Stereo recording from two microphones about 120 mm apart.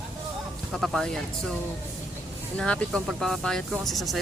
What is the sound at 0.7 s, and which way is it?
Speech, centre (ahead or behind).